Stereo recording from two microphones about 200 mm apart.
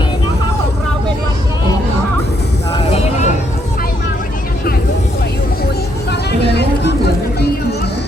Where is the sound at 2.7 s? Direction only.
30° left (ahead or behind).